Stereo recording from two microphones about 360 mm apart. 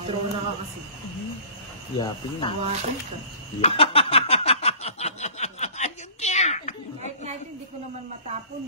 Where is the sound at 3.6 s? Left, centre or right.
Centre.